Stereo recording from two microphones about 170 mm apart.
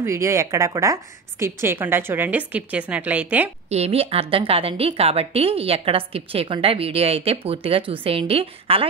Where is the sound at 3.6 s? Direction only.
40° right (ahead or behind).